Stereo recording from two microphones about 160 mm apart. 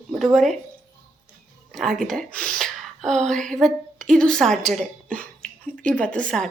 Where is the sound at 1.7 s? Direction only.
Centre (ahead or behind).